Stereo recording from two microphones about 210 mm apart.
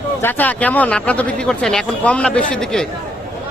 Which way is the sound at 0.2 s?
10° left (ahead or behind).